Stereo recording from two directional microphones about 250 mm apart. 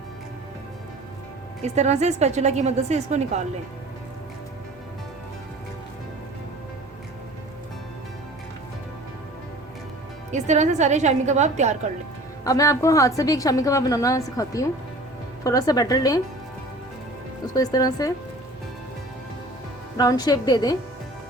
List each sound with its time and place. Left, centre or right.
1.6 s a woman's voice: right
10.3 s a woman's voice: right
12.5 s a woman's voice: centre
17.4 s a woman's voice: centre
20.0 s a woman's voice: centre